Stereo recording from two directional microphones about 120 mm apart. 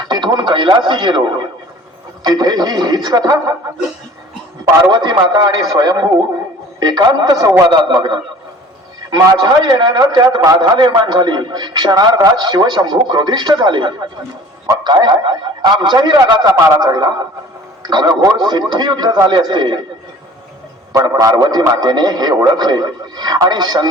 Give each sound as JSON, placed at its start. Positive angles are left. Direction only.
{"t": 0.1, "sound": "a man's voice", "side_deg": -35}
{"t": 2.2, "sound": "a man's voice", "side_deg": -35}
{"t": 4.9, "sound": "a man's voice", "side_deg": -35}
{"t": 20.9, "sound": "a man's voice", "side_deg": -25}